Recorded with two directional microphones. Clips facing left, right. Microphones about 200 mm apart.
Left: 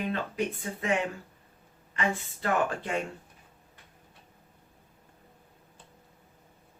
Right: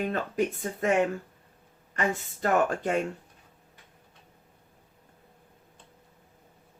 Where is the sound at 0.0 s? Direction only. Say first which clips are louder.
Right 3 dB; 45° right (ahead or behind).